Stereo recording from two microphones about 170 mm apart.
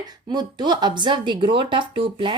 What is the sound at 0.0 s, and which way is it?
Speech, 25° right (ahead or behind).